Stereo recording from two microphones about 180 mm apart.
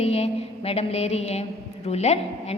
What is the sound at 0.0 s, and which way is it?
A woman's voice, 35° left (ahead or behind).